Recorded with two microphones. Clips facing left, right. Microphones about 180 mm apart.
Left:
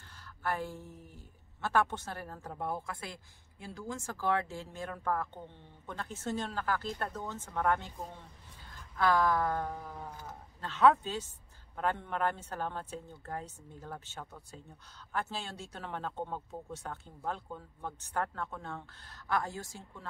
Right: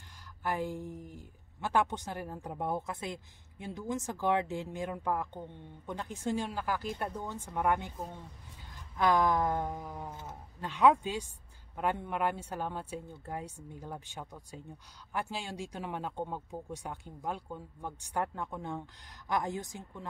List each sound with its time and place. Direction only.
0.4 s a woman's voice: 15° right (ahead or behind)